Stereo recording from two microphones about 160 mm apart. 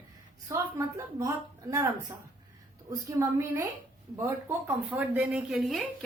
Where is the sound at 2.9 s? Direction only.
20° right (ahead or behind).